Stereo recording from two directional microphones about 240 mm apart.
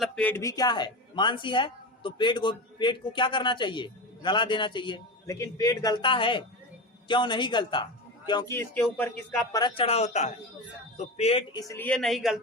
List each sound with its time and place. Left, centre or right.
0.0 s speech: centre
9.5 s speech: centre
11.7 s speech: centre